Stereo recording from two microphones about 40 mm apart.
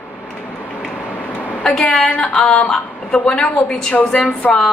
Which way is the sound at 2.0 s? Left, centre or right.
Left.